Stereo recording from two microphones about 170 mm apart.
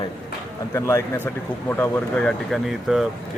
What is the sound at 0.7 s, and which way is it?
Speech, 15° left (ahead or behind).